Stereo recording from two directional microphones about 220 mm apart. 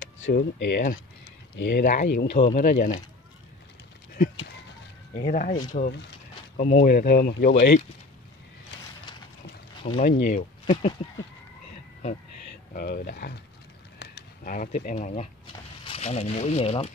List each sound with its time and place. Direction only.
0.0 s speech: 50° left (ahead or behind); by 2.9 s 35° left (ahead or behind)
5.1 s speech: 40° left (ahead or behind)
5.7 s a sound: 45° left (ahead or behind)
6.6 s speech: 35° left (ahead or behind)
9.9 s speech: 40° left (ahead or behind)
12.7 s speech: 45° left (ahead or behind); by 16.9 s 30° left (ahead or behind)